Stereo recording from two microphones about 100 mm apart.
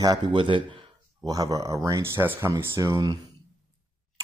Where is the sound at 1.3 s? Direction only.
35° right (ahead or behind).